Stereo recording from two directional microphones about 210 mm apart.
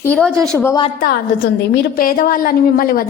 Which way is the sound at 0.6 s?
20° left (ahead or behind).